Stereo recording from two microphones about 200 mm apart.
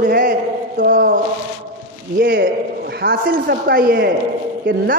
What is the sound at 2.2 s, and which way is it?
A man's voice, 50° right (ahead or behind).